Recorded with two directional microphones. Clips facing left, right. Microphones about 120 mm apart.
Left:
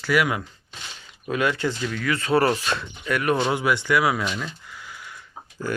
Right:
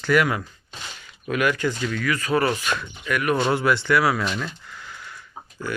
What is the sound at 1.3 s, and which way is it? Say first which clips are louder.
Speech: right 1 dB; 25° left (ahead or behind).